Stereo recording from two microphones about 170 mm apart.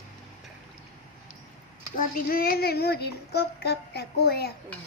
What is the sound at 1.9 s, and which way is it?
Speech, 60° left (ahead or behind).